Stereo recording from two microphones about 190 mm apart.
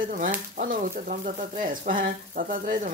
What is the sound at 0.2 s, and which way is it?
Speech, 45° right (ahead or behind).